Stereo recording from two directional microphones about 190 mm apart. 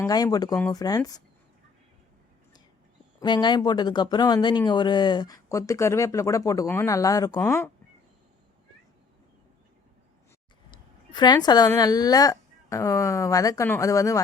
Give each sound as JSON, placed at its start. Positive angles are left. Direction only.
{"t": 0.0, "sound": "speech", "side_deg": 20}
{"t": 3.2, "sound": "speech", "side_deg": 25}
{"t": 10.7, "sound": "speech", "side_deg": 25}